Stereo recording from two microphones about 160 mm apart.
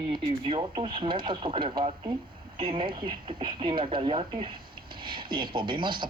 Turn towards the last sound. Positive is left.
turn(degrees=-30)  # may be behind; listen again after turning